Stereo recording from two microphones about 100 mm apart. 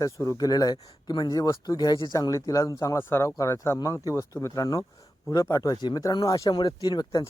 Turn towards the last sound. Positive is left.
turn(degrees=40)  # may be behind; listen again after turning